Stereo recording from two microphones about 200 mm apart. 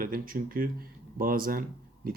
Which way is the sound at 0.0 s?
45° right (ahead or behind).